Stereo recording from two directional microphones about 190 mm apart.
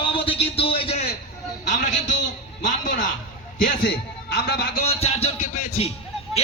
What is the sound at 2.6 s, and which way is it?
A man's voice, 40° left (ahead or behind).